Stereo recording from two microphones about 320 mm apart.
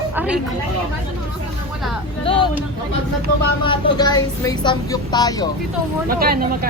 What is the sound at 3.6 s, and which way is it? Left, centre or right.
Speech, centre.